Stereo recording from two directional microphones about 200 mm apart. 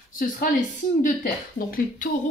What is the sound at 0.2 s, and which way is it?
Speech, 40° left (ahead or behind).